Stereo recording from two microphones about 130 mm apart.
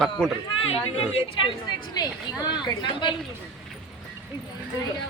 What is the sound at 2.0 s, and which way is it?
Speech, 30° left (ahead or behind).